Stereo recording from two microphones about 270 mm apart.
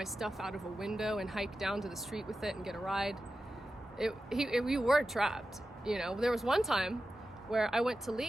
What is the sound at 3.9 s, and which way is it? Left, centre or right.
Speech, centre.